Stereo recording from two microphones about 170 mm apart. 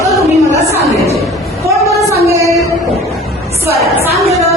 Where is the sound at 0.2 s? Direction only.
15° right (ahead or behind).